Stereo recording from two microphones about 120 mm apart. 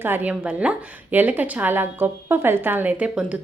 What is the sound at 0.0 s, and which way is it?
A woman's voice, 15° right (ahead or behind).